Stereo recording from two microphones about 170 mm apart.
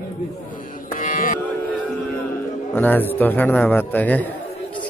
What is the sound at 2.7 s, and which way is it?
A man's voice, 10° left (ahead or behind).